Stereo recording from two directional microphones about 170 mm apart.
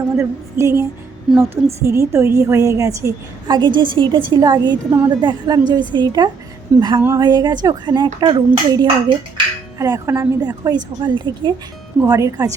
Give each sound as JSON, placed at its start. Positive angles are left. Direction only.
{"t": 0.2, "sound": "a woman's voice", "side_deg": -15}
{"t": 1.3, "sound": "a woman's voice", "side_deg": 0}
{"t": 1.8, "sound": "a woman's voice", "side_deg": -15}